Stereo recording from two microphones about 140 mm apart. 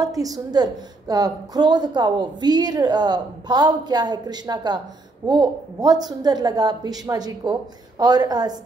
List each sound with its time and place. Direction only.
0.0 s a woman's voice: 25° right (ahead or behind)